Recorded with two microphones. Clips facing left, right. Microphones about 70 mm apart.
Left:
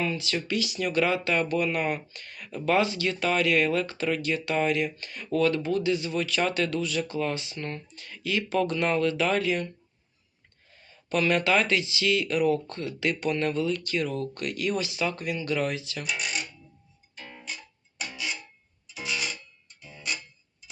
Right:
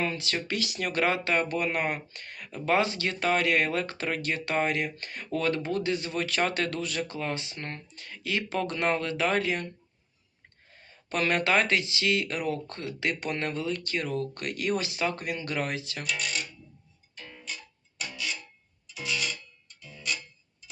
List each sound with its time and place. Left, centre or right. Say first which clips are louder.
0.0 s speech: left 1 dB; right
10.7 s speech: left 5 dB; right
16.0 s speech: left 1 dB; centre
17.3 s music: left 1 dB; centre